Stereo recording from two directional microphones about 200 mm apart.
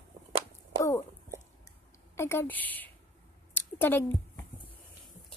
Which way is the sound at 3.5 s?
10° left (ahead or behind).